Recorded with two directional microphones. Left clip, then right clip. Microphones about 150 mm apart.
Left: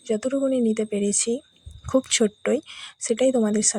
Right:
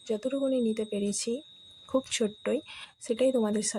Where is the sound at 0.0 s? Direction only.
30° left (ahead or behind).